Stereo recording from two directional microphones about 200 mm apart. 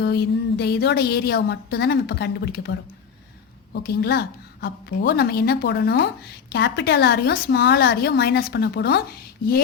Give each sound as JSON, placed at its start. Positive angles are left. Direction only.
{"t": 0.0, "sound": "a woman's voice", "side_deg": 55}